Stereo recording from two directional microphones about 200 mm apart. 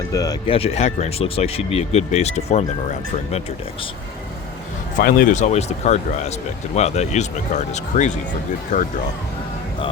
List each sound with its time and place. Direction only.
0.1 s speech: 15° left (ahead or behind); by 2.6 s 35° left (ahead or behind)
4.9 s speech: 45° left (ahead or behind)